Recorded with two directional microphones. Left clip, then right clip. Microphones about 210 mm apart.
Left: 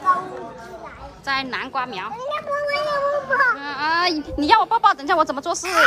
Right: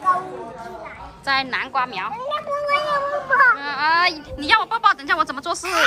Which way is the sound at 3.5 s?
15° left (ahead or behind).